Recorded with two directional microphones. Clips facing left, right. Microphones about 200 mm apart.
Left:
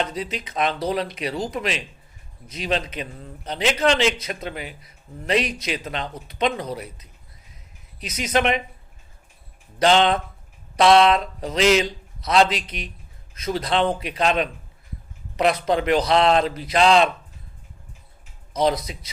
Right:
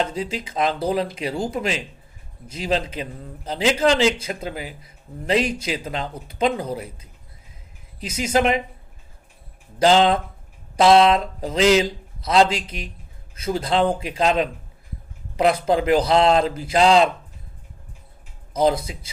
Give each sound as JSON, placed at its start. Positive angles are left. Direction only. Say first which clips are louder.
{"t": 0.0, "sound": "speech", "louder": "right 2 dB", "side_deg": -30}
{"t": 9.7, "sound": "speech", "louder": "right 2 dB", "side_deg": -30}
{"t": 18.6, "sound": "speech", "louder": "right 2 dB", "side_deg": -30}